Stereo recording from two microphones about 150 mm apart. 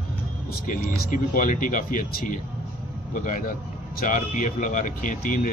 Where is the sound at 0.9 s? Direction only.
65° left (ahead or behind).